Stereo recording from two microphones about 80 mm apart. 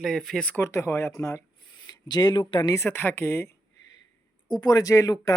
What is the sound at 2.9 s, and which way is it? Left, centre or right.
Speech, left.